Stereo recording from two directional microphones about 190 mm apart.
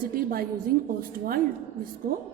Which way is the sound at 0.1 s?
50° right (ahead or behind).